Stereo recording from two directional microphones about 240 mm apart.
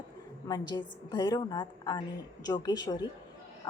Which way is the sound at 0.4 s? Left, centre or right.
Centre.